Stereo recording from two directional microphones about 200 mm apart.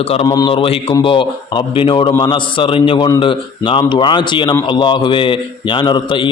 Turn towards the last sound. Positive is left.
turn(degrees=25)  # may be behind; listen again after turning